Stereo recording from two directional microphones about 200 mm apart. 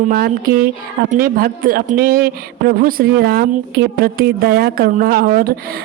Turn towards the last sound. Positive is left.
turn(degrees=-45)  # may be behind; listen again after turning